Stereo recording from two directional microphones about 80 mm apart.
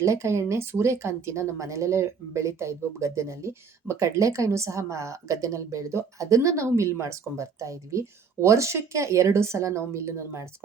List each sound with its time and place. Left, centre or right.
0.0 s speech: right